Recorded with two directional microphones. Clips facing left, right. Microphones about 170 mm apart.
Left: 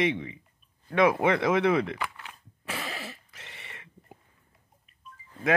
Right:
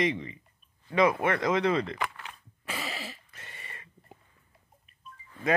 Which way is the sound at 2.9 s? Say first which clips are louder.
Left 1 dB; 10° right (ahead or behind).